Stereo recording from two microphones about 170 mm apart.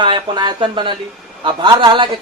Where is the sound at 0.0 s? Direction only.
25° right (ahead or behind).